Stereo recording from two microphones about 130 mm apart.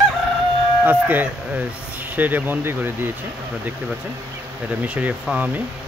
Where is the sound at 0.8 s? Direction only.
15° right (ahead or behind).